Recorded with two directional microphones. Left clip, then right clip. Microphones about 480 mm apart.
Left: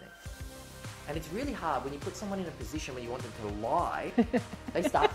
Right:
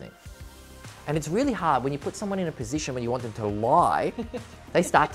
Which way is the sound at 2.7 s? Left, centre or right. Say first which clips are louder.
Right 9 dB; right.